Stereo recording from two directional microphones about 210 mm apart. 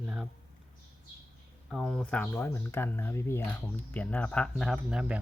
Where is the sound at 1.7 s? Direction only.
Centre (ahead or behind).